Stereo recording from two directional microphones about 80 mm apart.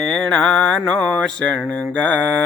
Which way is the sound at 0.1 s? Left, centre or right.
Centre.